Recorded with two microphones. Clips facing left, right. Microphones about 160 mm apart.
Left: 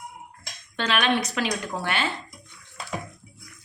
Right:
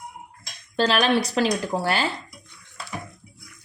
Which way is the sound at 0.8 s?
35° right (ahead or behind).